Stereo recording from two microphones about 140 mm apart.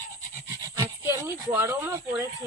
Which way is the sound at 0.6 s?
25° right (ahead or behind).